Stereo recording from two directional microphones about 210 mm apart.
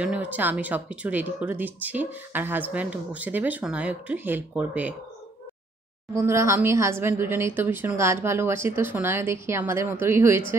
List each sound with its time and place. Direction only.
0.0 s speech: 5° right (ahead or behind)
6.1 s speech: 15° right (ahead or behind)